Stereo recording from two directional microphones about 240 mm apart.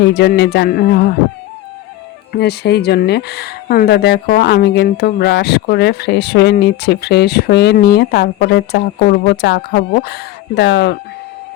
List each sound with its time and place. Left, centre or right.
0.1 s music: left
2.3 s speech: left